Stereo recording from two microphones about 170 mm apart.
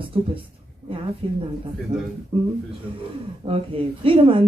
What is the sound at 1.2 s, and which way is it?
A woman's voice, 30° right (ahead or behind).